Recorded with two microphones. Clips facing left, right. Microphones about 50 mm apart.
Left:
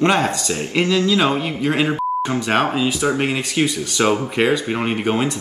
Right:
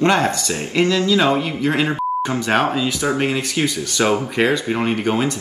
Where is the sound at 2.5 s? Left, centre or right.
Left.